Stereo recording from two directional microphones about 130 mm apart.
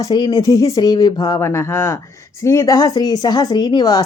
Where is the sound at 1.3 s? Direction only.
20° left (ahead or behind).